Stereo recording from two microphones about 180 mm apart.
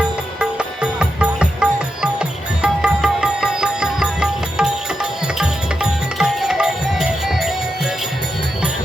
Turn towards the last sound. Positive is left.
turn(degrees=0)  # may be behind; listen again after turning